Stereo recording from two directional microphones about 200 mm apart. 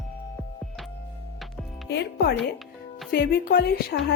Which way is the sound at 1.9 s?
55° left (ahead or behind).